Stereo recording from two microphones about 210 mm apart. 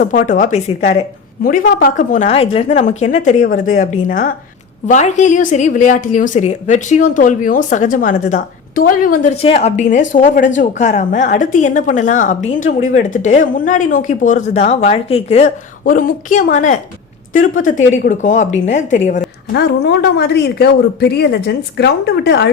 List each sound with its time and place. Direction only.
0.0 s a woman's voice: 40° left (ahead or behind)
9.3 s a woman's voice: 30° left (ahead or behind)
15.8 s a woman's voice: 40° left (ahead or behind)
18.0 s a woman's voice: 35° left (ahead or behind)
19.5 s speech: 50° left (ahead or behind)